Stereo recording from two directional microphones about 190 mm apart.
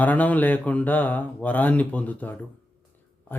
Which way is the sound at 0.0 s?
10° left (ahead or behind).